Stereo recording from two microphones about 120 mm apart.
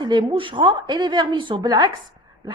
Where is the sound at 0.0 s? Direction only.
40° right (ahead or behind).